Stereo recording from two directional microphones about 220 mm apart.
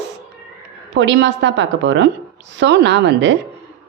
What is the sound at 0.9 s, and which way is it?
A woman's voice, 55° right (ahead or behind).